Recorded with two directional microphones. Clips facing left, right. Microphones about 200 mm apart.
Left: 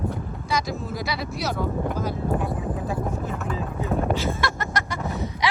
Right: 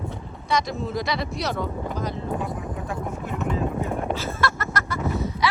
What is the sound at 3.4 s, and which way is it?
Vehicle, 25° right (ahead or behind).